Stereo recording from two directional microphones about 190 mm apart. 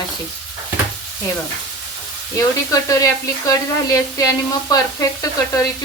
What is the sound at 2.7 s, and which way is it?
Sizzle, 20° left (ahead or behind).